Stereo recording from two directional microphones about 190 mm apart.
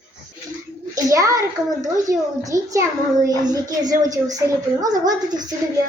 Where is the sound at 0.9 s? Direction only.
15° right (ahead or behind).